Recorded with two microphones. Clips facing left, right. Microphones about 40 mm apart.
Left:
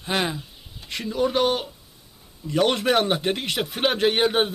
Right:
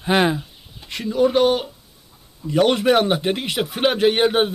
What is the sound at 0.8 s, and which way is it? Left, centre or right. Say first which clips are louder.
A man's voice: right 5 dB; centre.